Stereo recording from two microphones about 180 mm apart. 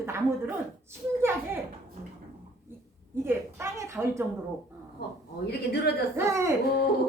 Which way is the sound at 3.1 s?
15° right (ahead or behind).